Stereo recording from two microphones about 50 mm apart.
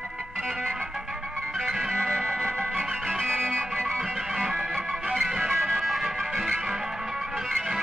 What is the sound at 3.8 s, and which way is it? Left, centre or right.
Music, centre.